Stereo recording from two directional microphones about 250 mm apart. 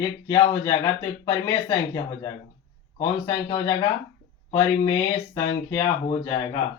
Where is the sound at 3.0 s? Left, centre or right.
Centre.